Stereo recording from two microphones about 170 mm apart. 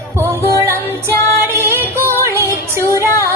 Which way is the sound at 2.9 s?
15° left (ahead or behind).